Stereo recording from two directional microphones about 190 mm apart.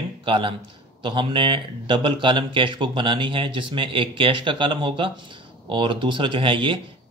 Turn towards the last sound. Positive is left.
turn(degrees=-25)  # may be behind; listen again after turning